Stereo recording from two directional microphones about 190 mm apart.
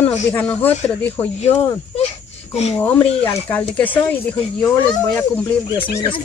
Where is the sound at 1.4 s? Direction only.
30° left (ahead or behind).